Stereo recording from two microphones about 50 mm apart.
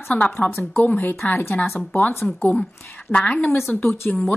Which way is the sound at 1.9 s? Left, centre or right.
Left.